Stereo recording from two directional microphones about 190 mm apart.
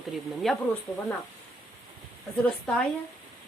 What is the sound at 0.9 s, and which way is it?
Speech, 20° left (ahead or behind).